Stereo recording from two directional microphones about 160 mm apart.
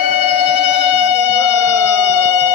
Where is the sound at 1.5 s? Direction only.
10° right (ahead or behind).